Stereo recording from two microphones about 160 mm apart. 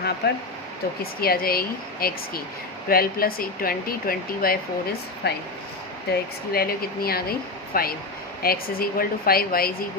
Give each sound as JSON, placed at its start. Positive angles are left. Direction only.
{"t": 0.2, "sound": "speech", "side_deg": 90}
{"t": 1.2, "sound": "speech", "side_deg": 70}